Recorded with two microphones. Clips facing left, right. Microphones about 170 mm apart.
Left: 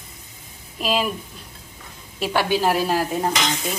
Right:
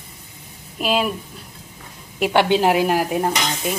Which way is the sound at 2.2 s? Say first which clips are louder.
Right 4 dB; 20° right (ahead or behind).